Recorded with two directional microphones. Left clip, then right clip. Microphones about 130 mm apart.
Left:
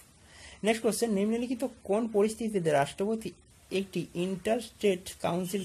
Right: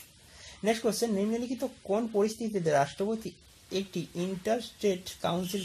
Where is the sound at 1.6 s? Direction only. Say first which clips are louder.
Even; 20° left (ahead or behind).